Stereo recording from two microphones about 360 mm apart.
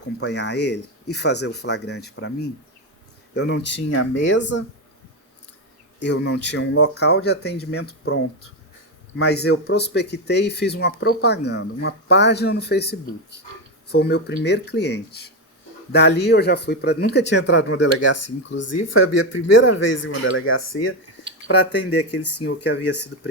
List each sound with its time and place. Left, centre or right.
0.2 s speech: left
6.0 s speech: left